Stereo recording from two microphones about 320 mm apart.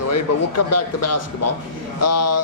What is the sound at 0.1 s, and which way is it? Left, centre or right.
Speech, left.